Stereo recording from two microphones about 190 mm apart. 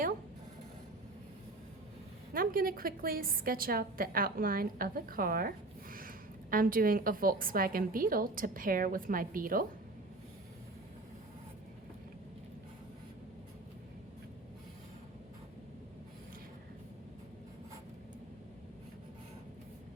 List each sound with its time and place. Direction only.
2.3 s a woman's voice: 50° right (ahead or behind)